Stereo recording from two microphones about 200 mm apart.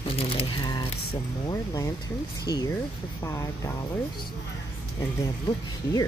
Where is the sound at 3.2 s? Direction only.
15° left (ahead or behind).